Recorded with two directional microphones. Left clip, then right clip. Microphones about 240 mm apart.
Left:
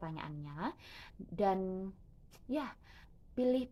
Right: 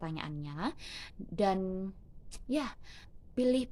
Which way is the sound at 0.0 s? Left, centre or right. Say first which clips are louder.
Right 4 dB; right.